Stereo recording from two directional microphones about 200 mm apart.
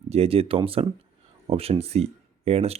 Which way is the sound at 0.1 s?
30° right (ahead or behind).